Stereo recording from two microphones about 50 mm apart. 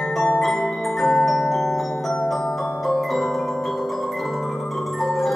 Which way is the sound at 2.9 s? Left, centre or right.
Centre.